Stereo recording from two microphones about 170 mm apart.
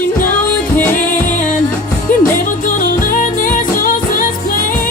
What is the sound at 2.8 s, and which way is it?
Music, 55° left (ahead or behind).